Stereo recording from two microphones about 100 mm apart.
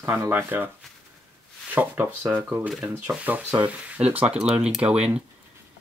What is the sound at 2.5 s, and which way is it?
Speech, 5° right (ahead or behind).